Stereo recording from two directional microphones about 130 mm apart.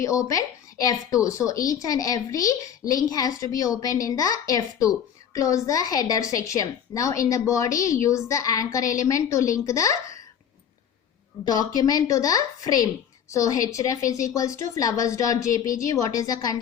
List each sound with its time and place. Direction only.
0.0 s speech: 25° left (ahead or behind)
11.4 s speech: 30° left (ahead or behind)